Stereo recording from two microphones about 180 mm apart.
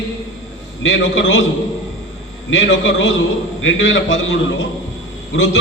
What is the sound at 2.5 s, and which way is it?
A man's voice, 90° left.